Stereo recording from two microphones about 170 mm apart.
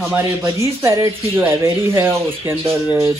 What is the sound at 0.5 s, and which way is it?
Speech, 20° right (ahead or behind).